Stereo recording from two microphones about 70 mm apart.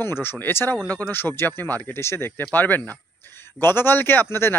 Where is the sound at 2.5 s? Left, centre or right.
Left.